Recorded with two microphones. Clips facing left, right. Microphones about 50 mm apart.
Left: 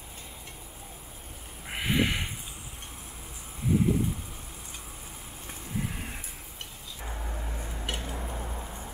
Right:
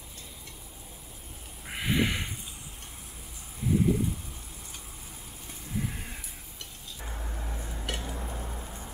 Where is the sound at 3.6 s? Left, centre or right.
Centre.